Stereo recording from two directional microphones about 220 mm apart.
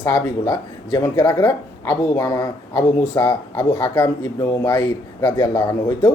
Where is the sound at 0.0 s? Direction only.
15° left (ahead or behind).